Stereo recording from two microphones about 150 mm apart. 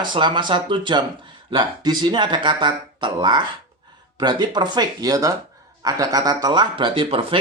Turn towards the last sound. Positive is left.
turn(degrees=-35)  # may be behind; listen again after turning